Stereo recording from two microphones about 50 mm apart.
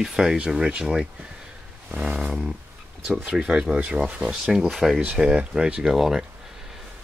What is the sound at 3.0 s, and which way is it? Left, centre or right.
Speech, centre.